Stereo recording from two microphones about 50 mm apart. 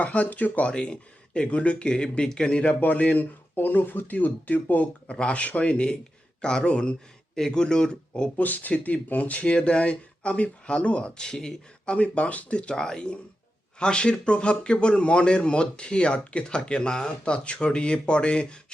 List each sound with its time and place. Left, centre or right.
0.0 s speech: left
0.7 s speech: centre; by 5.1 s left
5.1 s speech: left
8.4 s speech: left; by 11.9 s centre
11.9 s speech: left